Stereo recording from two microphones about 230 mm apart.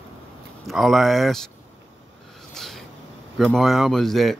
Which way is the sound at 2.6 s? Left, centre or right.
Centre.